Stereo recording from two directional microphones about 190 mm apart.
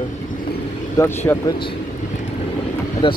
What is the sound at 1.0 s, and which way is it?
Speech, 15° left (ahead or behind).